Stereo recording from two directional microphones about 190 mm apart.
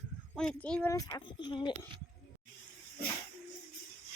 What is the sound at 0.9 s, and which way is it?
Speech, 20° left (ahead or behind).